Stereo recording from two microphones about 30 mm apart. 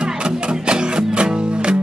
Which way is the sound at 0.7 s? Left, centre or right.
Right.